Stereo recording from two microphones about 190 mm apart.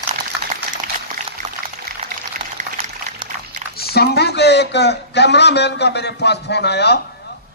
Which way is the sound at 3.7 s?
55° left (ahead or behind).